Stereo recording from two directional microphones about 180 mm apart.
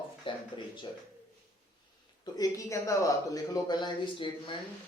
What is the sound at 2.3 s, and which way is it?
Speech, 15° left (ahead or behind).